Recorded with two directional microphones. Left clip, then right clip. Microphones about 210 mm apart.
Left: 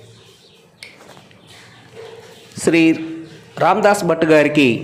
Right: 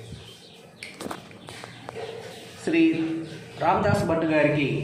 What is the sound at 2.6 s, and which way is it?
A man's voice, 40° left (ahead or behind).